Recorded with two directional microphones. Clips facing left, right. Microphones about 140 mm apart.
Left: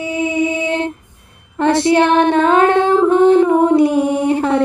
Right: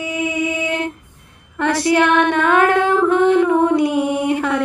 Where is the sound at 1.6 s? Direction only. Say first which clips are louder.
Left 3 dB; 25° left (ahead or behind).